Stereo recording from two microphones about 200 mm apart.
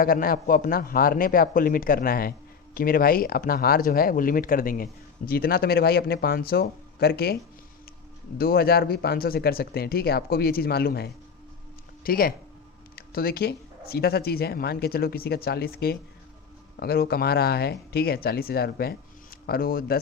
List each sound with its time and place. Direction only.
0.0 s speech: 45° left (ahead or behind)
8.4 s speech: 50° left (ahead or behind)